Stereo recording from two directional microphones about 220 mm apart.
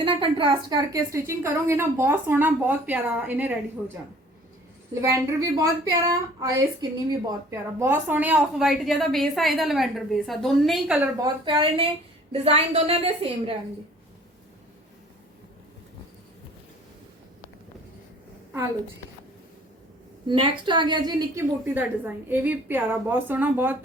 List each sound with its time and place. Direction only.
0.0 s a woman's voice: 20° right (ahead or behind)
4.9 s a woman's voice: 15° right (ahead or behind)
11.4 s a woman's voice: 20° right (ahead or behind)
20.2 s a woman's voice: 20° right (ahead or behind)